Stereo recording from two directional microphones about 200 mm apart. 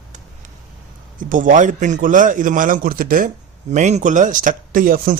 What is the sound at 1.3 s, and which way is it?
A man's voice, 40° right (ahead or behind).